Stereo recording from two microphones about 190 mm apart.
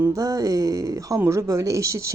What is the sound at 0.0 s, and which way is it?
Speech, 20° right (ahead or behind).